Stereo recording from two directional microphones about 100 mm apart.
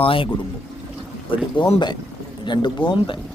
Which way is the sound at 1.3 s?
60° left (ahead or behind).